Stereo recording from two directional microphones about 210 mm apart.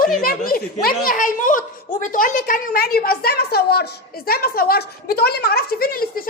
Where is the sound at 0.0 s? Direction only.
40° left (ahead or behind).